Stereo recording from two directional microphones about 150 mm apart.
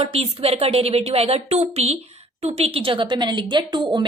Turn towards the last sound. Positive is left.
turn(degrees=-30)  # may be behind; listen again after turning